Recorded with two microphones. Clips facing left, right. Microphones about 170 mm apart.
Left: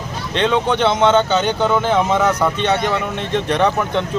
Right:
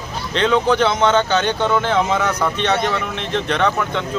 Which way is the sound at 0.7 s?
25° left (ahead or behind).